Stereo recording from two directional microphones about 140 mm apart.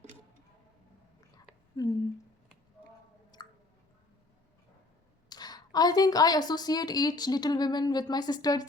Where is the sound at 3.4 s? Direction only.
30° left (ahead or behind).